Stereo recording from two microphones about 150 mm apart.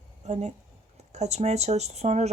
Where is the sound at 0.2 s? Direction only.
50° right (ahead or behind).